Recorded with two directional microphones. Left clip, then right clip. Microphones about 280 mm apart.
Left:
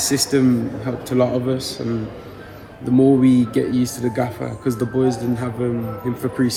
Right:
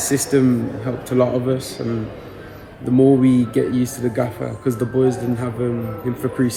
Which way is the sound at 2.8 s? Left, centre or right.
Centre.